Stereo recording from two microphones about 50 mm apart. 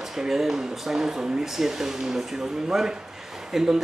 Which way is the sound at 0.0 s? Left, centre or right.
Centre.